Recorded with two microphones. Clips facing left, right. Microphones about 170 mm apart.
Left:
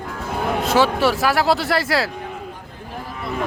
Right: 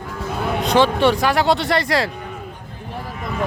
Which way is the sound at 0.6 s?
5° left (ahead or behind).